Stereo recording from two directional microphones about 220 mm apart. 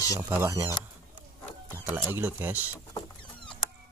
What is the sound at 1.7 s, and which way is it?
Speech, 10° right (ahead or behind).